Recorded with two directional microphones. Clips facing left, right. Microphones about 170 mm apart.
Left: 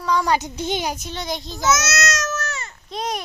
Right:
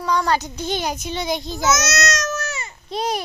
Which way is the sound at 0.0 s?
Centre (ahead or behind).